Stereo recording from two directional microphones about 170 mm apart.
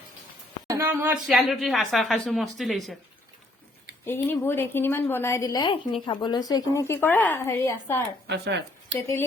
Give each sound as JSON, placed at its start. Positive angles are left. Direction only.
{"t": 0.7, "sound": "speech", "side_deg": -15}
{"t": 1.3, "sound": "a woman's voice", "side_deg": 0}
{"t": 4.0, "sound": "speech", "side_deg": 15}
{"t": 8.3, "sound": "speech", "side_deg": -80}